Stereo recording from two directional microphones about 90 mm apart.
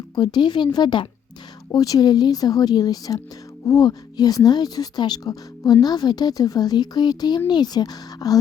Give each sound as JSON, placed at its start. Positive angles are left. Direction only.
{"t": 0.2, "sound": "speech", "side_deg": 55}